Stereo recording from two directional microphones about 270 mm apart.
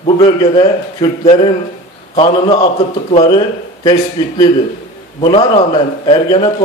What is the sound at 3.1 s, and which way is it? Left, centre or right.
A man's voice, left.